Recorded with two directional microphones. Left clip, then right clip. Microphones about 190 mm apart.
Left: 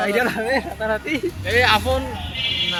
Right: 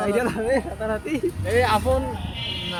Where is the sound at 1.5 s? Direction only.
15° right (ahead or behind).